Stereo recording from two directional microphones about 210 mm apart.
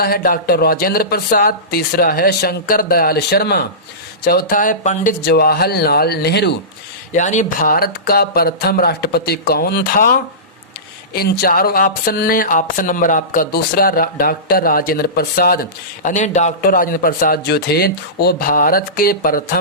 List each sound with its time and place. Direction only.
0.0 s speech: 45° left (ahead or behind)
5.2 s speech: 50° left (ahead or behind)
7.1 s speech: 35° left (ahead or behind)
16.0 s speech: 35° left (ahead or behind)